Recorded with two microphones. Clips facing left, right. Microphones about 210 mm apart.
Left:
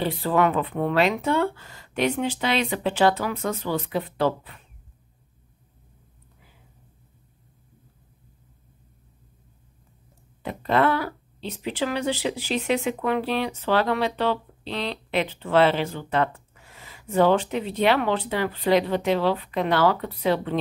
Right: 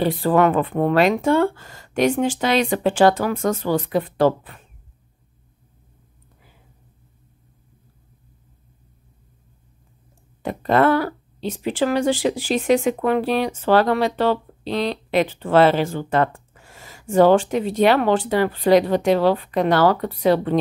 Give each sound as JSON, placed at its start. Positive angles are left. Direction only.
{"t": 0.0, "sound": "speech", "side_deg": -50}
{"t": 10.4, "sound": "speech", "side_deg": -50}